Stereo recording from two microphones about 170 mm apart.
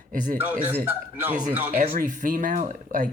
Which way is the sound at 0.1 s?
50° right (ahead or behind).